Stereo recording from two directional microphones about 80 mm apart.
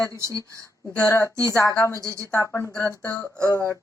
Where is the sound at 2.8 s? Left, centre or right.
Left.